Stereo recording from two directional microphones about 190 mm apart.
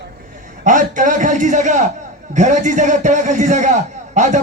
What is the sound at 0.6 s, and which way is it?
A man's voice, 40° right (ahead or behind).